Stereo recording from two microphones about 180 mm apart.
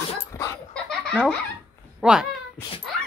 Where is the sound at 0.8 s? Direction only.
5° left (ahead or behind).